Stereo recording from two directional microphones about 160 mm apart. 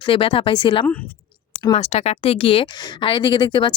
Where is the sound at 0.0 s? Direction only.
35° left (ahead or behind).